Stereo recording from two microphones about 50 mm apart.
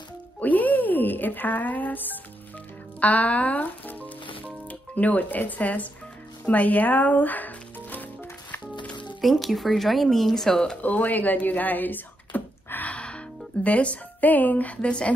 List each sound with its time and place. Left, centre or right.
0.4 s speech: left
3.0 s music: left
9.2 s speech: centre
10.8 s speech: left
12.9 s music: left
13.7 s speech: left